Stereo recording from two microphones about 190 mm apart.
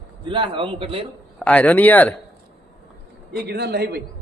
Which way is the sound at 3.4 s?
55° right (ahead or behind).